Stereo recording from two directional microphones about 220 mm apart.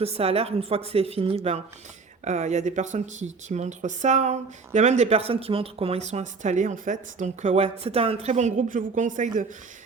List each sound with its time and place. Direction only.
0.0 s a woman's voice: 25° right (ahead or behind)